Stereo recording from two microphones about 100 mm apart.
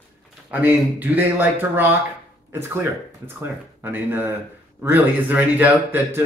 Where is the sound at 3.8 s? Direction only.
20° right (ahead or behind).